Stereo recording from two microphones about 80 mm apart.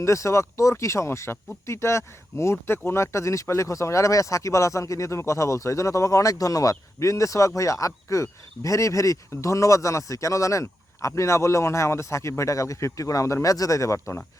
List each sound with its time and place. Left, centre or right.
0.0 s speech: left